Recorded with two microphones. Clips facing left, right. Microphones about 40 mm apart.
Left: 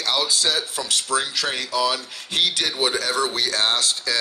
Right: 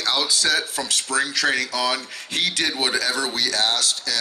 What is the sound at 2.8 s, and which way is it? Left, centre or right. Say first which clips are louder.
Speech: left 2 dB; right.